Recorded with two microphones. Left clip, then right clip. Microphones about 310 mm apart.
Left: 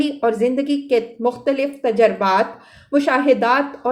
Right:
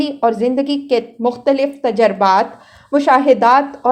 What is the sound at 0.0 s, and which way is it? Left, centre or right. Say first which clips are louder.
A woman's voice: right 2 dB; centre.